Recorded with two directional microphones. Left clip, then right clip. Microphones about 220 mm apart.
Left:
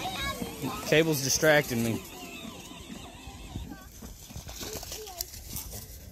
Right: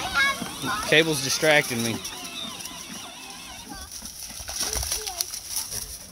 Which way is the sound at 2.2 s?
40° right (ahead or behind).